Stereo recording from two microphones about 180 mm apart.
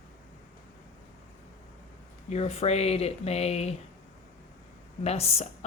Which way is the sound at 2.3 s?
35° left (ahead or behind).